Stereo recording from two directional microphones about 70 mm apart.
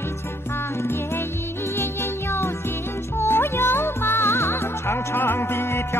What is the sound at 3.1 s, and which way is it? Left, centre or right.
Music, left.